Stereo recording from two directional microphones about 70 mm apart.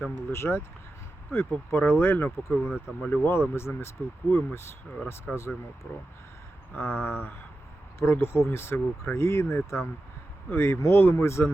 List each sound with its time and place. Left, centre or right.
0.0 s speech: left